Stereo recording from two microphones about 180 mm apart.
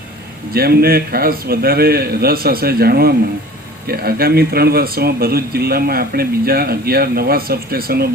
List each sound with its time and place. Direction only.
0.5 s speech: 60° right (ahead or behind)